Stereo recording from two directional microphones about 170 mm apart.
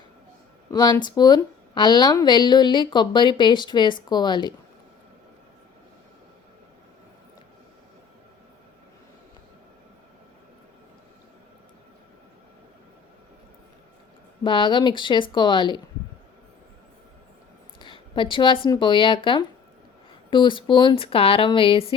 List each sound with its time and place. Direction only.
0.7 s speech: 25° left (ahead or behind)
14.4 s speech: 30° left (ahead or behind)
17.7 s speech: 30° left (ahead or behind)